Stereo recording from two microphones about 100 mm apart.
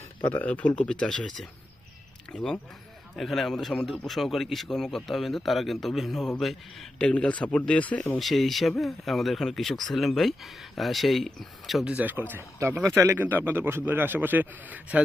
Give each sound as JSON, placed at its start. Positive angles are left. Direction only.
{"t": 0.3, "sound": "a man's voice", "side_deg": 15}
{"t": 8.2, "sound": "a man's voice", "side_deg": 0}
{"t": 11.9, "sound": "a man's voice", "side_deg": -15}